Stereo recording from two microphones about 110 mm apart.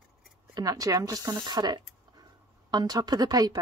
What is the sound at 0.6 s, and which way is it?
Speech, 35° right (ahead or behind).